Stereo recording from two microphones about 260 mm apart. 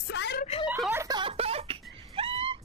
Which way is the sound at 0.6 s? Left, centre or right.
Centre.